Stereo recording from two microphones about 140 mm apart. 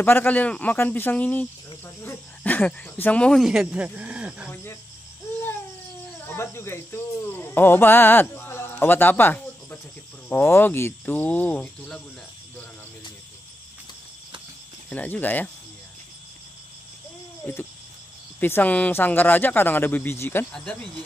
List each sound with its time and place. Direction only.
0.0 s speech: 15° left (ahead or behind); by 4.5 s 10° right (ahead or behind)
6.2 s speech: 15° left (ahead or behind)
14.9 s speech: 10° left (ahead or behind)
18.4 s speech: 10° left (ahead or behind)
20.5 s speech: 5° left (ahead or behind)